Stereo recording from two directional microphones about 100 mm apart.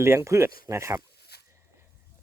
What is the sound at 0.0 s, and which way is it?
Speech, 25° right (ahead or behind).